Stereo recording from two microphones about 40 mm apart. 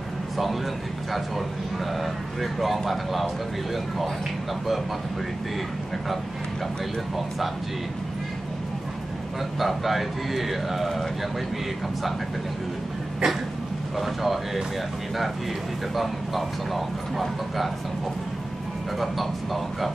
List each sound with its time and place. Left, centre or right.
2.0 s a man's voice: centre
7.2 s a man's voice: centre
9.6 s a man's voice: centre
13.2 s cough: right
13.9 s a man's voice: centre
16.0 s a man's voice: centre
18.9 s a man's voice: centre